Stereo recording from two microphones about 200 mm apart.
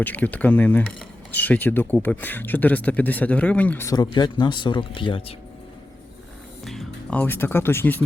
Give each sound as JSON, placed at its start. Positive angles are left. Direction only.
{"t": 0.0, "sound": "speech", "side_deg": 10}
{"t": 6.7, "sound": "speech", "side_deg": 5}